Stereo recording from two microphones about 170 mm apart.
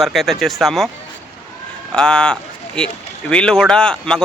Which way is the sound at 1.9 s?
5° left (ahead or behind).